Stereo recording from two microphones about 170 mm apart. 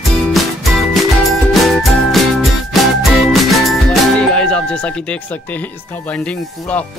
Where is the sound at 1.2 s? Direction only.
Centre (ahead or behind).